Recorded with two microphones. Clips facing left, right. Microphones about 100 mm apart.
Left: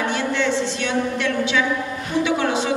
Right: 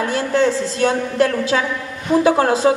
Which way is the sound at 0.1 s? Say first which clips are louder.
Right 4 dB; 40° right (ahead or behind).